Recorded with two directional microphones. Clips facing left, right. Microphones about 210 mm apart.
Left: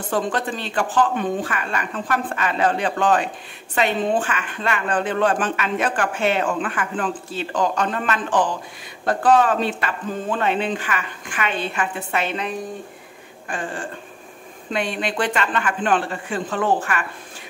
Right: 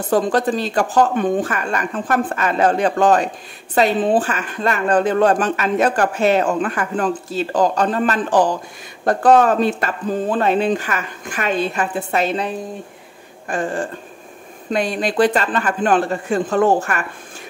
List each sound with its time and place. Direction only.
0.1 s a woman's voice: 40° right (ahead or behind)